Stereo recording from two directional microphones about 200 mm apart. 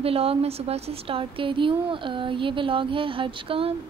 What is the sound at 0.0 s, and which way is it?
Speech, 30° right (ahead or behind).